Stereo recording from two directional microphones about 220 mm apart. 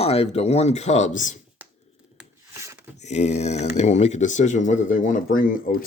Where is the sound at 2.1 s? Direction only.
10° right (ahead or behind).